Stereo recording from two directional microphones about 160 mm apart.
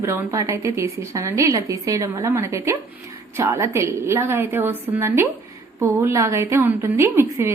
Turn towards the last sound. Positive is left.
turn(degrees=-15)  # may be behind; listen again after turning